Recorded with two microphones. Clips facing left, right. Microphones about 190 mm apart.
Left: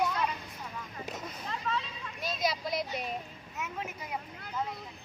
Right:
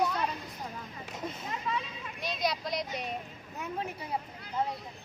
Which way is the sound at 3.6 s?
35° right (ahead or behind).